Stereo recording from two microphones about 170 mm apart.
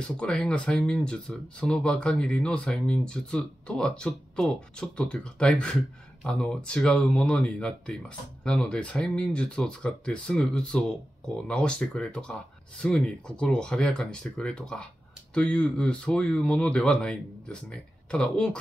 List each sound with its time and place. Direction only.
0.0 s speech: 5° left (ahead or behind)